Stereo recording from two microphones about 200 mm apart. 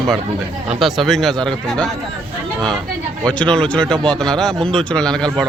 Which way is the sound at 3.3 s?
5° left (ahead or behind).